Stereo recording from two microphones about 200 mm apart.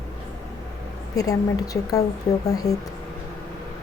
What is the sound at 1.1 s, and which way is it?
Speech, 15° left (ahead or behind).